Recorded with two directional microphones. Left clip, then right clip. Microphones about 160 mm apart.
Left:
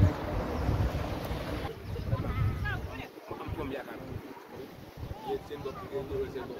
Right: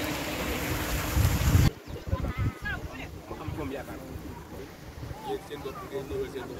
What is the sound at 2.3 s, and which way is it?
Sheep, 90° left.